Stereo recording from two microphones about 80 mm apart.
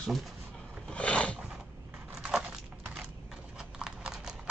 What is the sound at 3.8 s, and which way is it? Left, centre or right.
Clip-clop, centre.